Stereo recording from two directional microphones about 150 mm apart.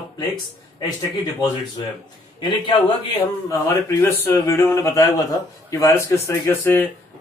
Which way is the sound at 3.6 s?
15° left (ahead or behind).